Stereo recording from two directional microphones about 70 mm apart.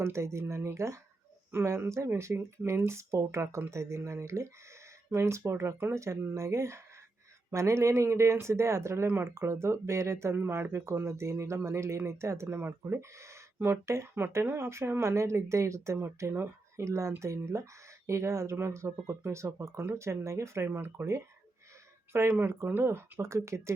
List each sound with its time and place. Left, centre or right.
0.0 s speech: right
12.5 s speech: right